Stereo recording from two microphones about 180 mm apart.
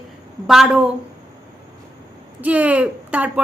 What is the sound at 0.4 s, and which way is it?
Speech, centre (ahead or behind).